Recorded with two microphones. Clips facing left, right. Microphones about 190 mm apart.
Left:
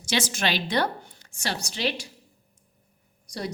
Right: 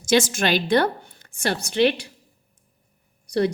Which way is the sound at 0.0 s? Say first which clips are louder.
Right 7 dB; 50° right (ahead or behind).